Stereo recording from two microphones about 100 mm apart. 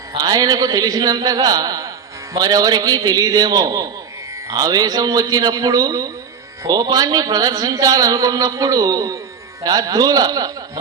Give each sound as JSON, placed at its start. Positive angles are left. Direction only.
{"t": 0.2, "sound": "a man's voice", "side_deg": -40}